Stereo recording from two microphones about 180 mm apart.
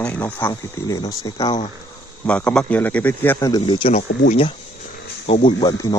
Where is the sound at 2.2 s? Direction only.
5° left (ahead or behind).